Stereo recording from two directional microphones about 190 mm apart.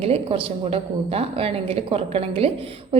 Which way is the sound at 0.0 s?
30° right (ahead or behind).